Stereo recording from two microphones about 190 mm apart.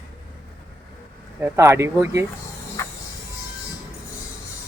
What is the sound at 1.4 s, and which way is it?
Speech, 15° right (ahead or behind).